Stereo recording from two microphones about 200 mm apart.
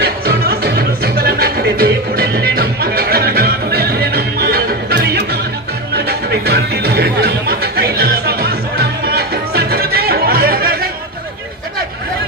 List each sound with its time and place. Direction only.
0.0 s music: 50° right (ahead or behind)